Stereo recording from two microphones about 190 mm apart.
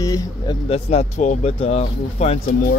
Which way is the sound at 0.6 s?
35° left (ahead or behind).